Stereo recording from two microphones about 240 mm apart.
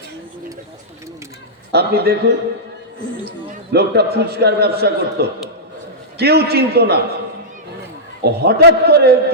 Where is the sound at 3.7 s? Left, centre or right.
Right.